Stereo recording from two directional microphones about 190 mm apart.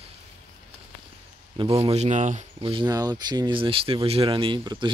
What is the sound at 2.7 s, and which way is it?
Speech, 25° right (ahead or behind).